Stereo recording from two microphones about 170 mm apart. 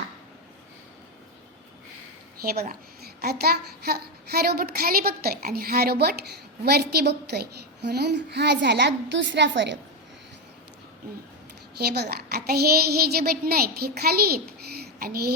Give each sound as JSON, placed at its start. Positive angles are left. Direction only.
{"t": 2.4, "sound": "a child's voice", "side_deg": -60}
{"t": 11.8, "sound": "a woman's voice", "side_deg": -70}